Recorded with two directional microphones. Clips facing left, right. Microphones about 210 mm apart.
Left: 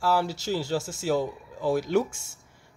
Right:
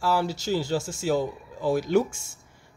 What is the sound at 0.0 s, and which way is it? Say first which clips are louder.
Speech: even; 5° left (ahead or behind).